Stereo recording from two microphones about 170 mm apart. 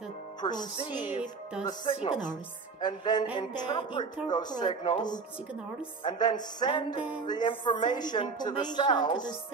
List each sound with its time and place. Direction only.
0.4 s a woman's voice: 25° left (ahead or behind)